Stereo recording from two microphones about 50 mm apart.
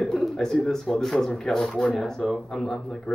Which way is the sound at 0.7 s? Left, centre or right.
Centre.